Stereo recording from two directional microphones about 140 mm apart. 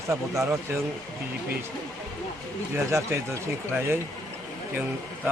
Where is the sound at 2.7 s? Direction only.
20° right (ahead or behind).